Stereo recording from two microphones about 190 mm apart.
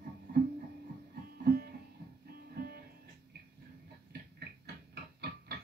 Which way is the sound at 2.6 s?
55° right (ahead or behind).